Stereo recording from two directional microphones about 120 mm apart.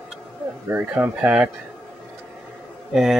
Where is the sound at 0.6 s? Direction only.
15° right (ahead or behind).